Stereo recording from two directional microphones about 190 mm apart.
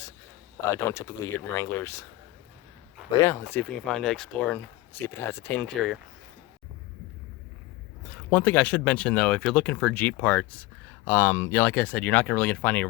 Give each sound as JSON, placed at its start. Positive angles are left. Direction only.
{"t": 0.7, "sound": "speech", "side_deg": 15}
{"t": 3.2, "sound": "speech", "side_deg": 15}
{"t": 8.1, "sound": "speech", "side_deg": 10}